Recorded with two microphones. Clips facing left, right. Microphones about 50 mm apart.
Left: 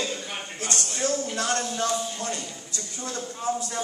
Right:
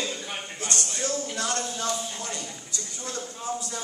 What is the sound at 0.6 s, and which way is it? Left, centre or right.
A woman's voice, left.